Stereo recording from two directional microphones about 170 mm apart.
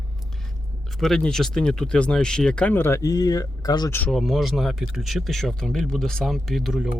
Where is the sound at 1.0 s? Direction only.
5° left (ahead or behind); by 4.0 s 20° left (ahead or behind).